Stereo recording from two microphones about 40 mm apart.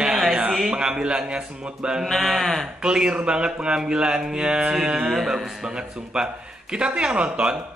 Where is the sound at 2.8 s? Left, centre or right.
Centre.